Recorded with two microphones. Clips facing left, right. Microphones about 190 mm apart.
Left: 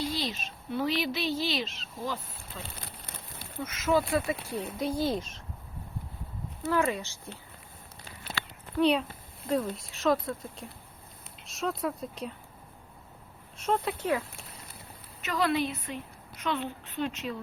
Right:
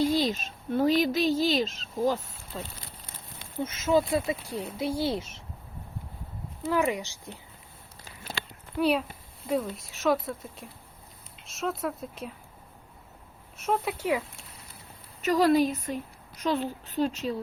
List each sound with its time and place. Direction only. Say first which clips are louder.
0.0 s a woman's voice: right 8 dB; 45° right (ahead or behind); by 4.4 s 20° right (ahead or behind)
4.8 s speech: right 1 dB; 10° right (ahead or behind)
6.7 s speech: right 1 dB; 15° right (ahead or behind)
8.8 s speech: even; 5° right (ahead or behind)
13.6 s speech: right 1 dB; 5° right (ahead or behind)
15.2 s a woman's voice: right 6 dB; 40° right (ahead or behind)